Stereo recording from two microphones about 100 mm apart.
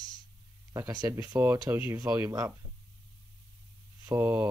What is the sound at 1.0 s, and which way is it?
Speech, 25° right (ahead or behind).